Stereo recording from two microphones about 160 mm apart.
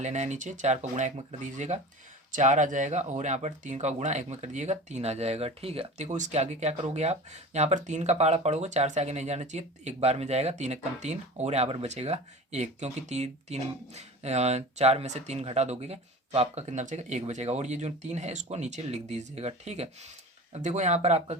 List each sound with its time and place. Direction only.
0.0 s speech: 45° right (ahead or behind)